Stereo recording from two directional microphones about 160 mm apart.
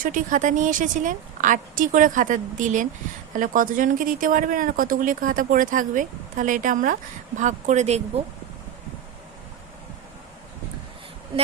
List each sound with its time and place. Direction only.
0.0 s a woman's voice: 55° right (ahead or behind)